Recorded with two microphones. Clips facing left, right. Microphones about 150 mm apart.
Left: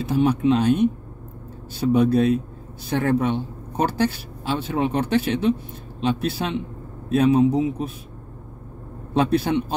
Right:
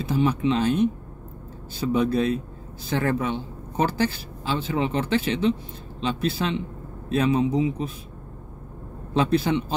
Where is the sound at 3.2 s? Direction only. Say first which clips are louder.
Left 4 dB; 60° left (ahead or behind).